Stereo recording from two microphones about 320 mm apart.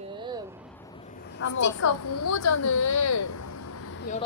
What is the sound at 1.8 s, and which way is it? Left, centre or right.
A woman's voice, left.